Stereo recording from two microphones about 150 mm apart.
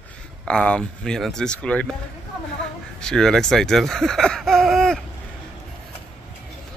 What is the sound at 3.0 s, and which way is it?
Speech, 5° left (ahead or behind).